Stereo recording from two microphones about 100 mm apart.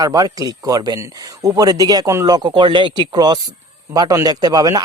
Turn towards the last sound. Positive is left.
turn(degrees=-40)  # may be behind; listen again after turning